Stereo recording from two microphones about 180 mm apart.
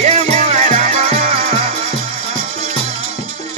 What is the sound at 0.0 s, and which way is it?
Music, 35° right (ahead or behind).